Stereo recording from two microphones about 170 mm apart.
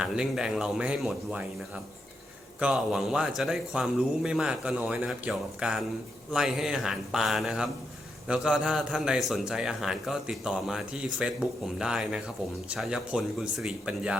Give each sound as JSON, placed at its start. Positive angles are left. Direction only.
{"t": 0.0, "sound": "a man's voice", "side_deg": -5}
{"t": 2.6, "sound": "a man's voice", "side_deg": -5}